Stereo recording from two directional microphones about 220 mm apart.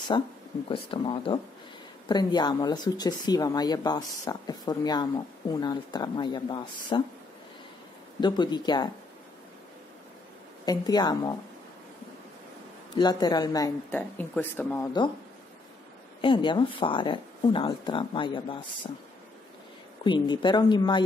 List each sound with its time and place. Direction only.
0.1 s speech: 20° left (ahead or behind)
8.2 s speech: 20° left (ahead or behind)
10.6 s speech: 20° left (ahead or behind)
12.9 s speech: 20° left (ahead or behind)
16.2 s speech: 20° left (ahead or behind)
20.0 s speech: 20° left (ahead or behind)